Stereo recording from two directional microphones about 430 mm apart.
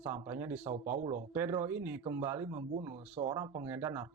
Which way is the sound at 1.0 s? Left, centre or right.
Centre.